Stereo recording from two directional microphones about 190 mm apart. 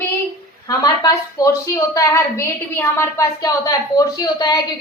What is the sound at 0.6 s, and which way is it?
A woman's voice, 20° left (ahead or behind).